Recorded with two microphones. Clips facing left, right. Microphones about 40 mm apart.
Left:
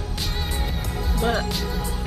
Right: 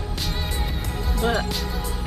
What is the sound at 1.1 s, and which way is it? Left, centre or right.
Speech, centre.